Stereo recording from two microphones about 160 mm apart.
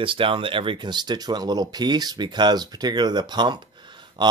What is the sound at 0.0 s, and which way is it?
Speech, 35° right (ahead or behind).